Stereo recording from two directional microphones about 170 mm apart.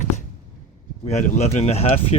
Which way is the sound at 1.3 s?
40° left (ahead or behind).